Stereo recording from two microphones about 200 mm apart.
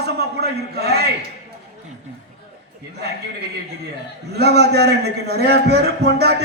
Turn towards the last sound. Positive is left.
turn(degrees=-55)  # may be behind; listen again after turning